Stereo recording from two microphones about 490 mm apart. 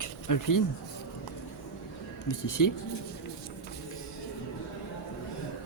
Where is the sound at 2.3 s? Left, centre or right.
Left.